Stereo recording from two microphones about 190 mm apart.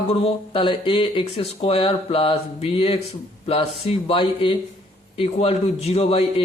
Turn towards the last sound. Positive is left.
turn(degrees=30)  # may be behind; listen again after turning